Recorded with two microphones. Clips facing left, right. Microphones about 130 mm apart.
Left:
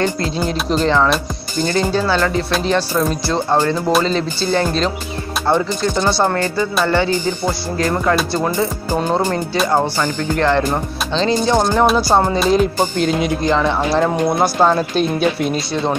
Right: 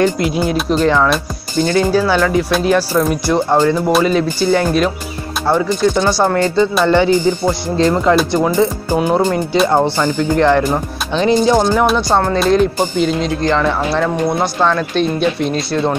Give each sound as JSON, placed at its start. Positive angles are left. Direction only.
{"t": 0.0, "sound": "speech", "side_deg": -15}
{"t": 11.8, "sound": "speech", "side_deg": 0}
{"t": 14.4, "sound": "speech", "side_deg": 15}
{"t": 15.0, "sound": "speech", "side_deg": 5}